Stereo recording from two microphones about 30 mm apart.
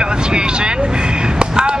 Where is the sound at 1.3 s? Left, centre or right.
Right.